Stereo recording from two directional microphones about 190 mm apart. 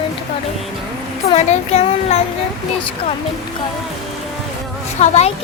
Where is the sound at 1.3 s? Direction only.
35° left (ahead or behind).